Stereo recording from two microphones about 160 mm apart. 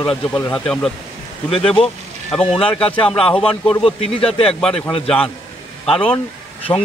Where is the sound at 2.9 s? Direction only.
35° left (ahead or behind).